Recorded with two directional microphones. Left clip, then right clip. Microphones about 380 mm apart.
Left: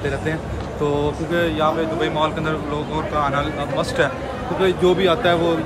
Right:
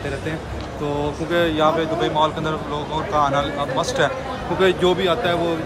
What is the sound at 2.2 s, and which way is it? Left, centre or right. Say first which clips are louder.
Speech: even; centre.